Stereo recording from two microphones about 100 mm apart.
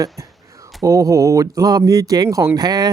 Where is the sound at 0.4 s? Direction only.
30° right (ahead or behind).